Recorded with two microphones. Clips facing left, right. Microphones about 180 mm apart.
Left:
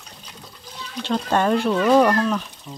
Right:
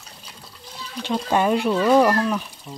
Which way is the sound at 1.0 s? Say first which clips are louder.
Even; 10° right (ahead or behind).